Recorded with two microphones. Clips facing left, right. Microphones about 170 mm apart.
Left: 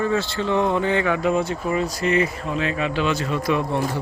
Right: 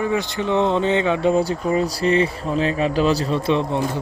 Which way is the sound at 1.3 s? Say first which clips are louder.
Right 3 dB; 35° right (ahead or behind).